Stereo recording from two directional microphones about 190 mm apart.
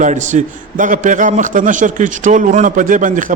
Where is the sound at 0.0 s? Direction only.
40° right (ahead or behind).